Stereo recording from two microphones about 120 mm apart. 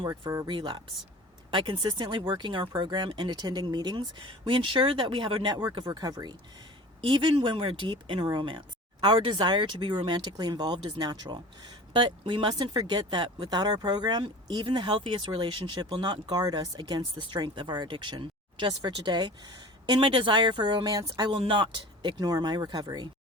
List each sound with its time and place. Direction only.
0.0 s speech: 35° right (ahead or behind)
0.4 s speech: 45° right (ahead or behind)
16.3 s speech: 35° right (ahead or behind)